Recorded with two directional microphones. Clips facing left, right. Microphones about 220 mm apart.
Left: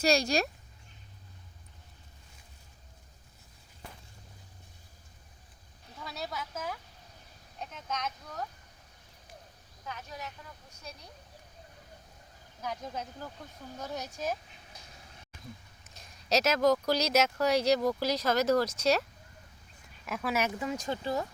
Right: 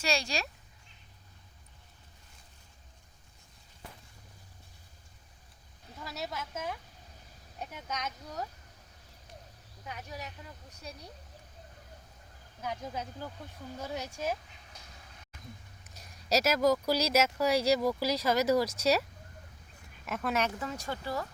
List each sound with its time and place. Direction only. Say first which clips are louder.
0.0 s speech: left 6 dB; 40° left (ahead or behind)
6.0 s speech: even; 5° right (ahead or behind)
7.7 s speech: left 2 dB; 15° right (ahead or behind)
9.8 s speech: even; 15° right (ahead or behind)
12.6 s speech: even; 5° right (ahead or behind)
16.0 s speech: even; 10° right (ahead or behind)
20.1 s speech: even; centre (ahead or behind); by 21.2 s 20° left (ahead or behind)